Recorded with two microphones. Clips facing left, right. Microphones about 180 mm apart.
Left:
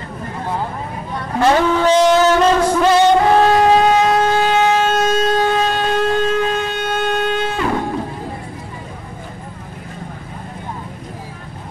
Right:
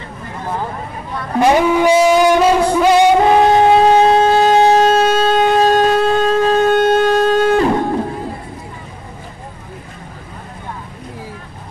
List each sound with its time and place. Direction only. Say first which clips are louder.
1.4 s music: right 2 dB; 15° right (ahead or behind)
3.9 s siren: right 4 dB; 30° right (ahead or behind)
5.6 s civil defense siren: right 5 dB; 40° right (ahead or behind)
6.7 s a sound: right 8 dB; 45° right (ahead or behind)